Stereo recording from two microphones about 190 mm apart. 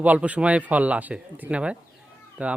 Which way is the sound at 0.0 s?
5° right (ahead or behind).